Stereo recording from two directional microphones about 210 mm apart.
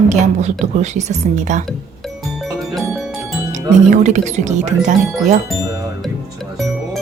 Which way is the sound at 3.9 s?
35° right (ahead or behind).